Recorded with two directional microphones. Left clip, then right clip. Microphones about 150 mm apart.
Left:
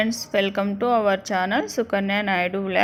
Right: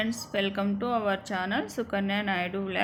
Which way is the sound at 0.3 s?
40° left (ahead or behind).